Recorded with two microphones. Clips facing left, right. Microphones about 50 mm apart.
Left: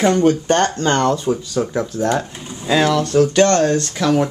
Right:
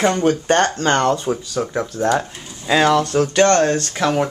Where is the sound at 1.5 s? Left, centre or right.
Centre.